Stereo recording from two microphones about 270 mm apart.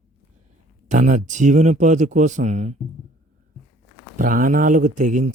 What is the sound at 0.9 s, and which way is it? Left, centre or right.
Speech, right.